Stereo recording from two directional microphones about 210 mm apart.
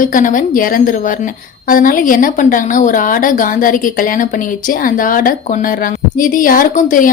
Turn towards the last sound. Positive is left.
turn(degrees=40)  # may be behind; listen again after turning